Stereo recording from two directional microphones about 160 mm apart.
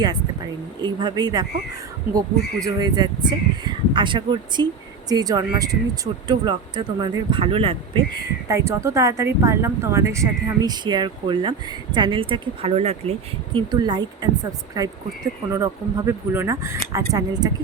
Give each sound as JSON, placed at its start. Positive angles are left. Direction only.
{"t": 0.8, "sound": "speech", "side_deg": -25}
{"t": 2.6, "sound": "speech", "side_deg": -25}
{"t": 8.4, "sound": "speech", "side_deg": -20}